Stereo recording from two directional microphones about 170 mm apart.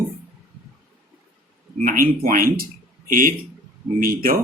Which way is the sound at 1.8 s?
55° right (ahead or behind).